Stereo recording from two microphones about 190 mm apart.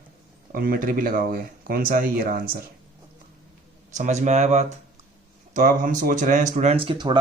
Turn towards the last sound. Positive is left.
turn(degrees=-25)  # may be behind; listen again after turning